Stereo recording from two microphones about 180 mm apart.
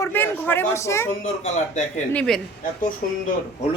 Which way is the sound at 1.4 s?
40° left (ahead or behind).